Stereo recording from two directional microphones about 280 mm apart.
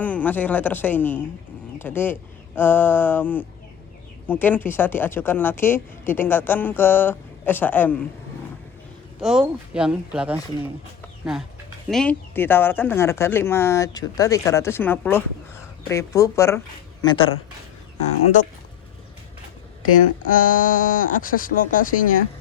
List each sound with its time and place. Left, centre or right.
0.0 s speech: centre
9.2 s speech: centre
11.9 s speech: centre
20.3 s speech: left